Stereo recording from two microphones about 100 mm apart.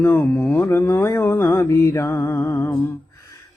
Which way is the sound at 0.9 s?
30° left (ahead or behind).